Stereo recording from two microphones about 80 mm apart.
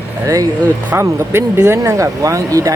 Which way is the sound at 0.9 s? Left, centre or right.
Right.